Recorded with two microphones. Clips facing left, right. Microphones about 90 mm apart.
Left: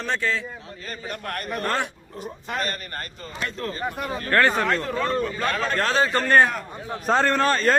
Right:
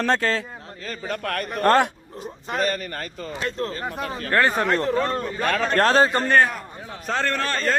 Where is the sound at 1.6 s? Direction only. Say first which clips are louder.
Right 9 dB; 40° right (ahead or behind).